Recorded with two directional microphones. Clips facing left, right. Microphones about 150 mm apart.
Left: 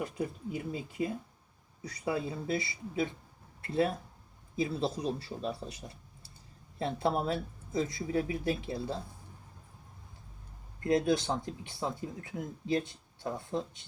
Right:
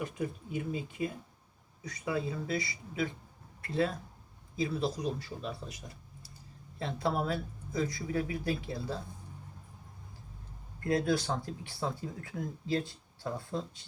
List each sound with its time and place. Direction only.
0.0 s speech: 35° left (ahead or behind)
10.8 s speech: 20° left (ahead or behind)